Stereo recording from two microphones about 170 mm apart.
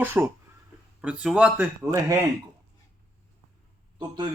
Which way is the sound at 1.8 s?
20° right (ahead or behind).